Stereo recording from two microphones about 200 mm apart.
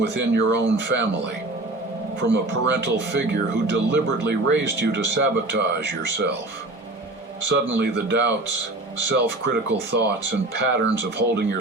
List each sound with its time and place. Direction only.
0.0 s speech: 60° right (ahead or behind)
7.8 s speech: 55° right (ahead or behind)